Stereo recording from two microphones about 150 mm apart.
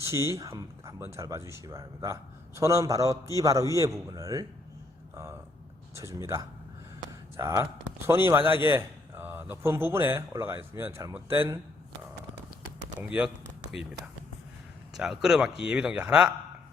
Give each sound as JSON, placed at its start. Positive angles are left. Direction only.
{"t": 0.0, "sound": "a man's voice", "side_deg": -20}
{"t": 13.1, "sound": "speech", "side_deg": -5}